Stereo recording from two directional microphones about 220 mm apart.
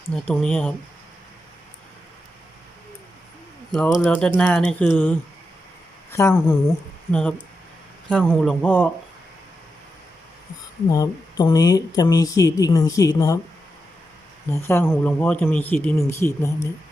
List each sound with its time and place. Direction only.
0.1 s speech: 5° left (ahead or behind)
3.7 s speech: centre (ahead or behind)
6.1 s speech: 15° left (ahead or behind)
7.1 s speech: 5° left (ahead or behind)
10.8 s speech: 15° left (ahead or behind)
14.5 s speech: 10° left (ahead or behind)